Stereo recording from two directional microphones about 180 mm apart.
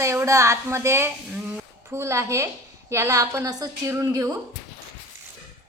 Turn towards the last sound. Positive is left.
turn(degrees=-20)  # may be behind; listen again after turning